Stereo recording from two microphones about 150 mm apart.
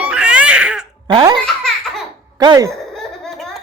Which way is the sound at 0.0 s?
10° right (ahead or behind).